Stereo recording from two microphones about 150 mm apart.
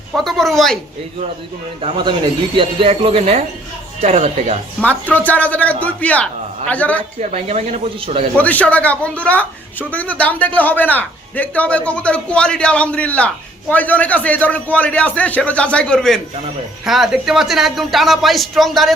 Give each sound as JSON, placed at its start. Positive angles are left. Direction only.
{"t": 0.1, "sound": "speech", "side_deg": 0}
{"t": 1.8, "sound": "speech", "side_deg": -30}
{"t": 4.8, "sound": "a woman's voice", "side_deg": 10}
{"t": 7.2, "sound": "speech", "side_deg": -50}
{"t": 8.4, "sound": "a woman's voice", "side_deg": 10}